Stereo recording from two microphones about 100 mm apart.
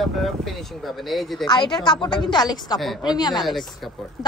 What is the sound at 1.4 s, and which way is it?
A woman's voice, 50° left (ahead or behind).